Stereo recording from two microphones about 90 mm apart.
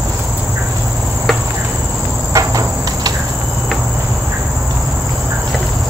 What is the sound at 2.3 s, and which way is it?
Cricket, 40° right (ahead or behind).